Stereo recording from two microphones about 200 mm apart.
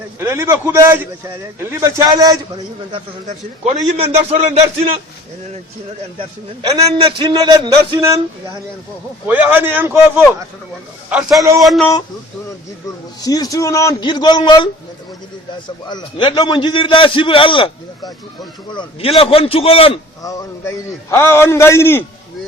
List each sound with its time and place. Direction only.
0.2 s a man's voice: 15° right (ahead or behind)
3.2 s a man's voice: 35° right (ahead or behind)
6.1 s a man's voice: 25° right (ahead or behind)
9.2 s a man's voice: 10° right (ahead or behind)
11.1 s a man's voice: centre (ahead or behind)
13.2 s a man's voice: 20° left (ahead or behind)
20.2 s a man's voice: 15° left (ahead or behind)